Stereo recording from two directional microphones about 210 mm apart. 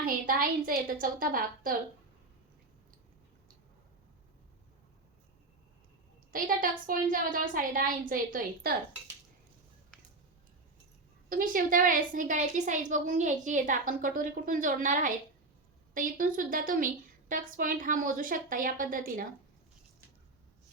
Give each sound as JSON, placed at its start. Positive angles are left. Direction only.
{"t": 0.0, "sound": "a woman's voice", "side_deg": -40}
{"t": 6.3, "sound": "a woman's voice", "side_deg": -40}
{"t": 11.3, "sound": "a woman's voice", "side_deg": -40}